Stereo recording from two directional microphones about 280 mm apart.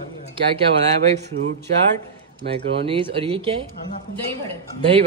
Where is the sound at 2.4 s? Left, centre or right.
Centre.